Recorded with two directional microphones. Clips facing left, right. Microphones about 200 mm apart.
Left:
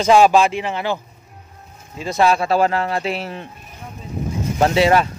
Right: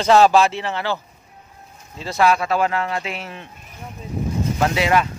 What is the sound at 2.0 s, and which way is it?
Speech, 20° left (ahead or behind).